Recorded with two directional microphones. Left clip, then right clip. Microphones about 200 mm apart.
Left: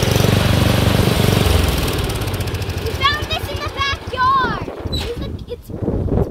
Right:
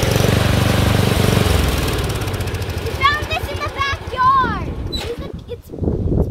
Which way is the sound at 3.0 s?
25° right (ahead or behind).